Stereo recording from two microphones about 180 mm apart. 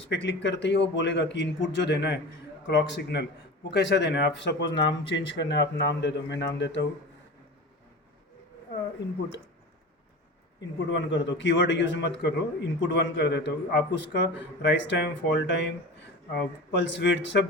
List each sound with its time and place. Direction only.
0.0 s a man's voice: 90° left
10.9 s a man's voice: 90° left